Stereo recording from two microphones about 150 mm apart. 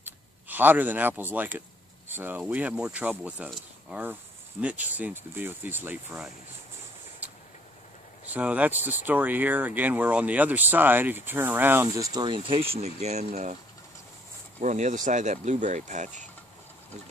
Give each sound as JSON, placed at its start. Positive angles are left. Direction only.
{"t": 0.0, "sound": "speech", "side_deg": -10}
{"t": 8.3, "sound": "speech", "side_deg": -10}
{"t": 12.1, "sound": "speech", "side_deg": -30}
{"t": 14.6, "sound": "speech", "side_deg": -55}